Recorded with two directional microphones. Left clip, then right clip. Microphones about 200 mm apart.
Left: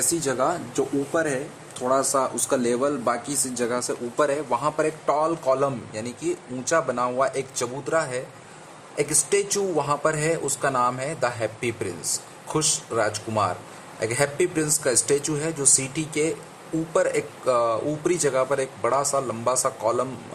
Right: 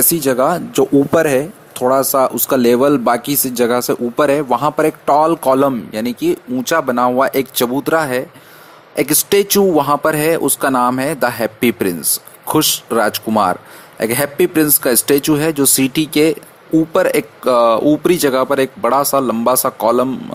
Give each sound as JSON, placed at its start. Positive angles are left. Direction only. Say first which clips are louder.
{"t": 0.1, "sound": "speech", "louder": "right 10 dB", "side_deg": -35}